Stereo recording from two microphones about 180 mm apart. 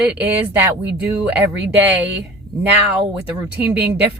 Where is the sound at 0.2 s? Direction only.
10° right (ahead or behind).